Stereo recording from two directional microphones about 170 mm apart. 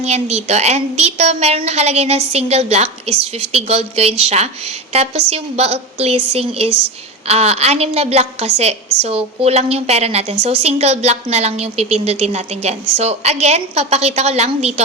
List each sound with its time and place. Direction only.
0.0 s a woman's voice: 40° right (ahead or behind)